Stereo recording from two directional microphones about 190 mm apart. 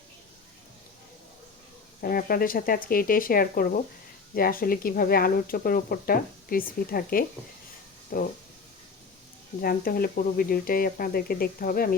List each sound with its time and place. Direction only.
2.0 s speech: 50° left (ahead or behind)
9.6 s speech: 50° left (ahead or behind)